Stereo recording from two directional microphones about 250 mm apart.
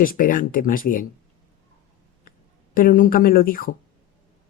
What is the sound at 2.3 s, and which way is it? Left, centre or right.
Speech, left.